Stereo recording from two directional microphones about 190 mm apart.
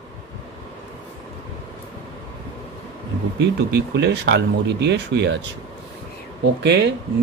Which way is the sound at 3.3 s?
65° right (ahead or behind).